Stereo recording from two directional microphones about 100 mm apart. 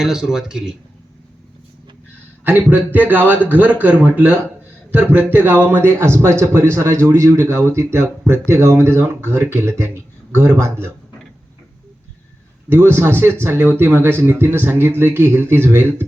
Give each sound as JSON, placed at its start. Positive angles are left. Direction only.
{"t": 0.0, "sound": "speech", "side_deg": -5}
{"t": 2.4, "sound": "a man's voice", "side_deg": -20}
{"t": 12.6, "sound": "speech", "side_deg": -25}